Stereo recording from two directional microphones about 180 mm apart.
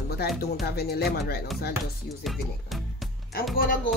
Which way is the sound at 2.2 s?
Centre (ahead or behind).